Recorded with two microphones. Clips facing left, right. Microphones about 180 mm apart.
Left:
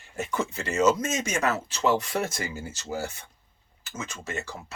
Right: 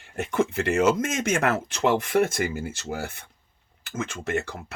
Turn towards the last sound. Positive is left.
turn(degrees=-60)  # may be behind; listen again after turning